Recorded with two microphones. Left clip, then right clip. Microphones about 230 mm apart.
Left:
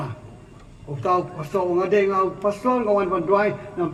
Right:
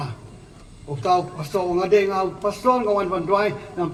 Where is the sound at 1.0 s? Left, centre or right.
Right.